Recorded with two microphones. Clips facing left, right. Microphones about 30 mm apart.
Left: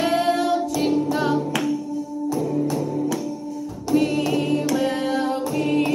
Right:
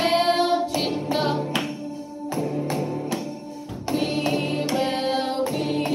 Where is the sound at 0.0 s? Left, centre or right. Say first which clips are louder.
Even; right.